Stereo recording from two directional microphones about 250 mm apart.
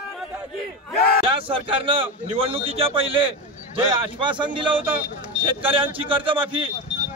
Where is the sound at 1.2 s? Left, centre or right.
Right.